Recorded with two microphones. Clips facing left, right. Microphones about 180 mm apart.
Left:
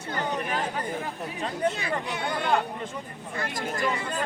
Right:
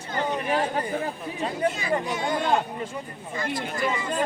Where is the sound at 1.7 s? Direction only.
60° left (ahead or behind).